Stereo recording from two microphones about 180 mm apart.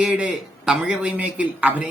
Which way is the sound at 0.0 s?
5° right (ahead or behind).